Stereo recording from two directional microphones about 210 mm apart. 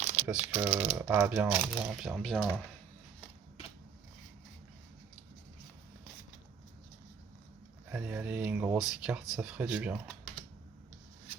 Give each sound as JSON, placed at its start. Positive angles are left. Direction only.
{"t": 0.0, "sound": "typing", "side_deg": -30}
{"t": 0.5, "sound": "speech", "side_deg": -5}
{"t": 7.9, "sound": "speech", "side_deg": -10}